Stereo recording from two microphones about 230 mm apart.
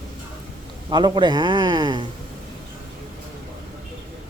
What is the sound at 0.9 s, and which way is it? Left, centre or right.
A man's voice, centre.